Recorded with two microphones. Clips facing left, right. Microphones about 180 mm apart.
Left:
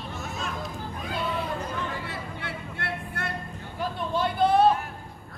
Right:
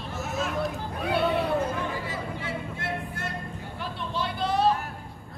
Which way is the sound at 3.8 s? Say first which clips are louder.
Left 5 dB; 50° left (ahead or behind).